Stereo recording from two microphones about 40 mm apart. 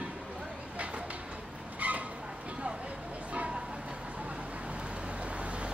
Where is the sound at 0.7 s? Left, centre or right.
Right.